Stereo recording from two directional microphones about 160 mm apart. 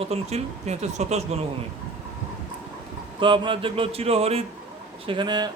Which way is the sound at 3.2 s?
30° right (ahead or behind).